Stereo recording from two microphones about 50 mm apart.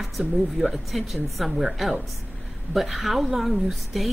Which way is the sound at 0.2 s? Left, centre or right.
Centre.